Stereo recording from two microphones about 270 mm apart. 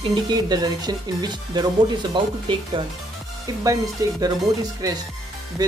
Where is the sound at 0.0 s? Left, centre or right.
Centre.